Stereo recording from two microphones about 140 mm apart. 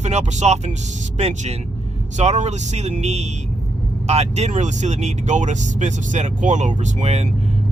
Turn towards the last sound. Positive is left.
turn(degrees=-50)  # may be behind; listen again after turning